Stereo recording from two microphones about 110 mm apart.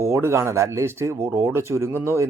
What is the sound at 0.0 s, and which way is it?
Speech, 25° right (ahead or behind).